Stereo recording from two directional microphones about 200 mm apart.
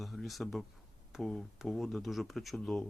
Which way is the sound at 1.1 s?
Centre (ahead or behind).